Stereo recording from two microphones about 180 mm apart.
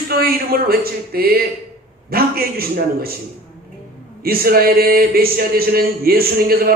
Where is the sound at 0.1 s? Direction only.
55° right (ahead or behind).